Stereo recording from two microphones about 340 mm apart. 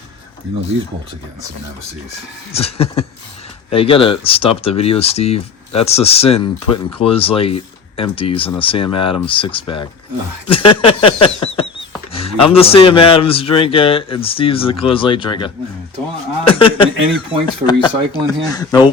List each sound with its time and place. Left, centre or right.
2.5 s speech: centre